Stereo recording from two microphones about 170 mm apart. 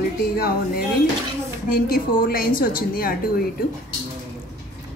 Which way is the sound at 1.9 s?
60° left (ahead or behind).